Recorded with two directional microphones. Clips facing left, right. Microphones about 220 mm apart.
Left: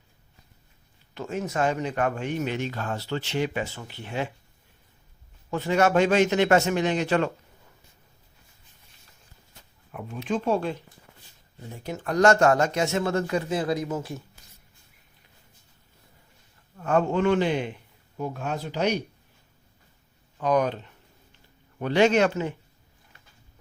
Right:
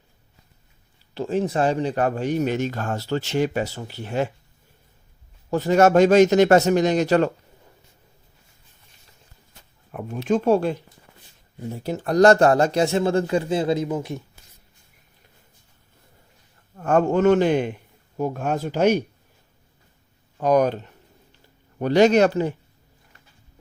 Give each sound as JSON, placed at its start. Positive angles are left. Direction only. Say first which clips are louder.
{"t": 1.1, "sound": "speech", "louder": "right 7 dB", "side_deg": -30}
{"t": 5.5, "sound": "speech", "louder": "right 6 dB", "side_deg": -40}
{"t": 9.9, "sound": "a man's voice", "louder": "right 6 dB", "side_deg": -45}
{"t": 11.9, "sound": "speech", "louder": "right 5 dB", "side_deg": -35}
{"t": 13.8, "sound": "speech", "louder": "right 4 dB", "side_deg": -15}
{"t": 16.7, "sound": "a man's voice", "louder": "right 4 dB", "side_deg": -50}
{"t": 20.4, "sound": "a man's voice", "louder": "right 5 dB", "side_deg": -45}